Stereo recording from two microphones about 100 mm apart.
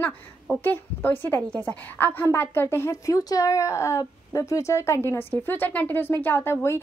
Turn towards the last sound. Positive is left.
turn(degrees=25)  # may be behind; listen again after turning